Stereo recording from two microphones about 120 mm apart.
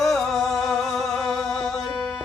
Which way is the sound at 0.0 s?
Centre (ahead or behind).